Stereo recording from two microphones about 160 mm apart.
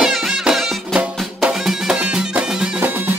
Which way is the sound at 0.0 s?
Centre (ahead or behind).